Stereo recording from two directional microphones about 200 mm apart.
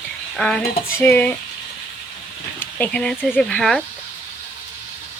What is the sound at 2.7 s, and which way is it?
Speech, 5° left (ahead or behind).